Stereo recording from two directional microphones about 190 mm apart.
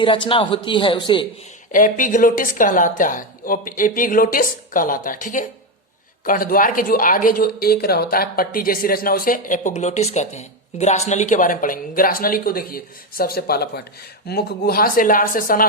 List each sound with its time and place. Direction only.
0.0 s a man's voice: 25° left (ahead or behind)
1.7 s a woman's voice: 45° left (ahead or behind)